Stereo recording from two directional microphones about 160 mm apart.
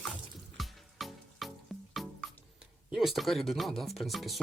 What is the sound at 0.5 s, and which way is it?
Music, centre (ahead or behind).